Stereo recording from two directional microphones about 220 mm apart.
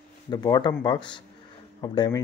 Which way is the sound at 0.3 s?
20° left (ahead or behind).